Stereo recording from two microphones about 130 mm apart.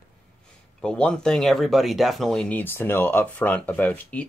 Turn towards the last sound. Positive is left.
turn(degrees=10)  # may be behind; listen again after turning